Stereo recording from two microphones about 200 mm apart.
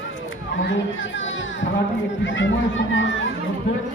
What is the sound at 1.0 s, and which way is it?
A child's voice, 70° left (ahead or behind).